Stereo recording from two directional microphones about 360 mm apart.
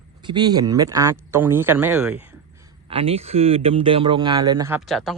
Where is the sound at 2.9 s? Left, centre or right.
Centre.